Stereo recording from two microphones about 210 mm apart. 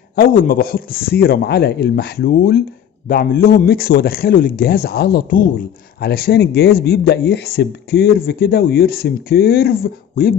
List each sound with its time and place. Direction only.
0.1 s speech: 45° left (ahead or behind)